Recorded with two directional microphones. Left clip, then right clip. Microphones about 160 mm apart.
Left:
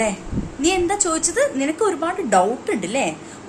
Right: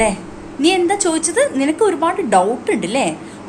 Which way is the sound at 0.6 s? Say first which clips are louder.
Right 5 dB; 20° left (ahead or behind).